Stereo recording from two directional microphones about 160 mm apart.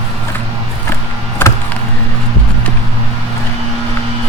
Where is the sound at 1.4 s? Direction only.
15° left (ahead or behind).